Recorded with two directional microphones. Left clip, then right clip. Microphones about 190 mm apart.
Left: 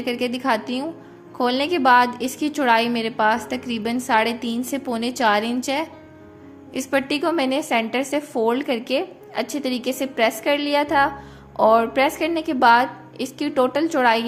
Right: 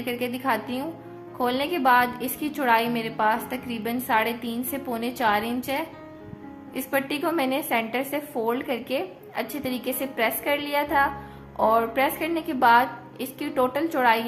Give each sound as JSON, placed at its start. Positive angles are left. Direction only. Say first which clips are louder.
{"t": 0.0, "sound": "a woman's voice", "louder": "left 4 dB", "side_deg": 30}